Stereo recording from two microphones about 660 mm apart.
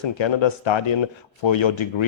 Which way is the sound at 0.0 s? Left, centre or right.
Left.